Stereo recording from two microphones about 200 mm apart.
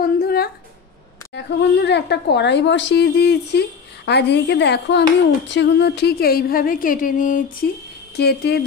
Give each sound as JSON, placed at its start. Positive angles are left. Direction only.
{"t": 0.0, "sound": "a sound", "side_deg": 50}
{"t": 1.3, "sound": "speech", "side_deg": 60}
{"t": 8.2, "sound": "speech", "side_deg": 55}